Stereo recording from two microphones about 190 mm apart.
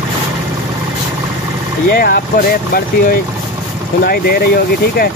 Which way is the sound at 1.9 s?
50° left (ahead or behind).